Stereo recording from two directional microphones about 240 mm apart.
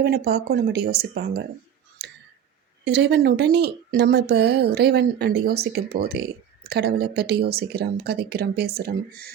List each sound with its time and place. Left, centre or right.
0.0 s speech: right
2.0 s tick: right
2.8 s speech: right